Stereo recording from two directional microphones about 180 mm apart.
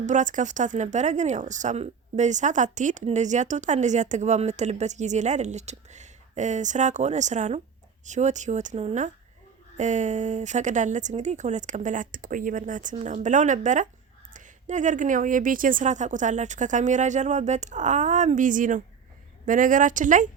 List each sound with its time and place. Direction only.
0.0 s a woman's voice: 45° right (ahead or behind)